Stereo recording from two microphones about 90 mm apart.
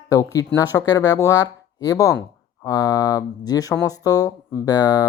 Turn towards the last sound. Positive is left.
turn(degrees=45)  # may be behind; listen again after turning